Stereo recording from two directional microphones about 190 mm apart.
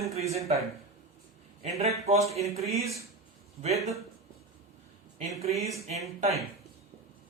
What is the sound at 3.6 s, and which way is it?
Speech, 35° right (ahead or behind).